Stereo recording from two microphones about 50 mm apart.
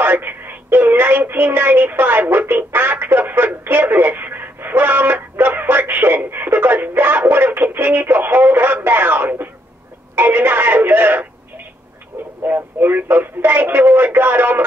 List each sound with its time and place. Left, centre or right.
0.0 s speech: right
12.4 s speech: right